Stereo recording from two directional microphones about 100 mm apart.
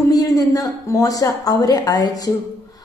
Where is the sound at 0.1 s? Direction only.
35° left (ahead or behind).